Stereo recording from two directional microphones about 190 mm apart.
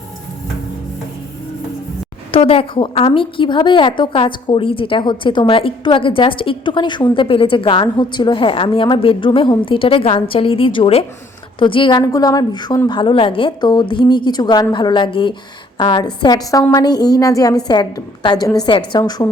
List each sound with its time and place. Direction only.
2.3 s a woman's voice: 30° left (ahead or behind)